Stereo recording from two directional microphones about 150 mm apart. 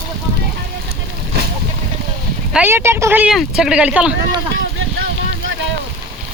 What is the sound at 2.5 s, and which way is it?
Speech, 15° right (ahead or behind).